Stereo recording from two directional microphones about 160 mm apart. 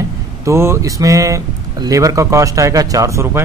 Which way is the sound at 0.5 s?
15° right (ahead or behind).